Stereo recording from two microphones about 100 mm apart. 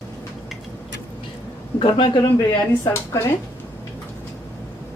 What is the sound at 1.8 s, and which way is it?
Speech, 55° left (ahead or behind).